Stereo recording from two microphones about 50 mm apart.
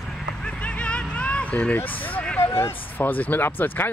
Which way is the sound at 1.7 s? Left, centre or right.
Left.